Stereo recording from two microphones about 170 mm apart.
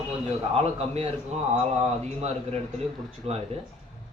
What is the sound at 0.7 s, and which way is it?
Speech, 40° right (ahead or behind).